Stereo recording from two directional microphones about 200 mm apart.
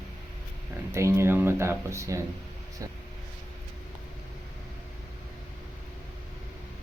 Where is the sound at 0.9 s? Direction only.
15° right (ahead or behind).